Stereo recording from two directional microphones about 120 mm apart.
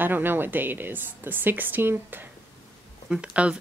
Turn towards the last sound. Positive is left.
turn(degrees=-10)  # may be behind; listen again after turning